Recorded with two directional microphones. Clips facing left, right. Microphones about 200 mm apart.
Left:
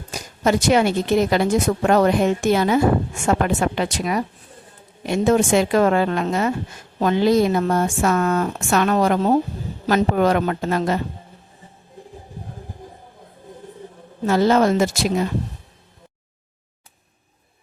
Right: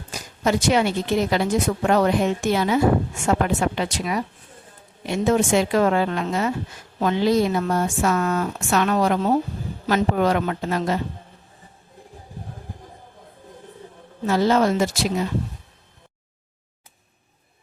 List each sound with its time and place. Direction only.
0.4 s speech: 50° left (ahead or behind)
14.3 s speech: 50° left (ahead or behind)